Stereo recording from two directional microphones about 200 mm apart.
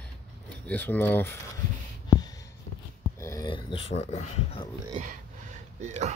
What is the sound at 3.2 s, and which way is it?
Speech, 15° left (ahead or behind).